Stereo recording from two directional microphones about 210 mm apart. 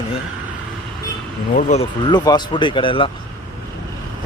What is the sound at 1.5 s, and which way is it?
Speech, 35° left (ahead or behind).